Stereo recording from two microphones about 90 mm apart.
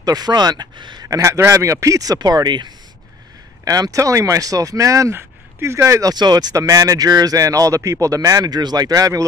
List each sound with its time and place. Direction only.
0.0 s speech: 50° right (ahead or behind)
1.0 s speech: 35° right (ahead or behind); by 2.7 s 50° right (ahead or behind)
3.6 s speech: 40° right (ahead or behind)
6.1 s speech: 50° right (ahead or behind)